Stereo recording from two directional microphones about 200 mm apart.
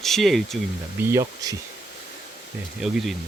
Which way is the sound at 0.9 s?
15° right (ahead or behind).